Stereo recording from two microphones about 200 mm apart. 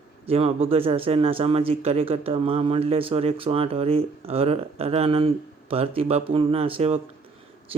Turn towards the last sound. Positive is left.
turn(degrees=-30)  # may be behind; listen again after turning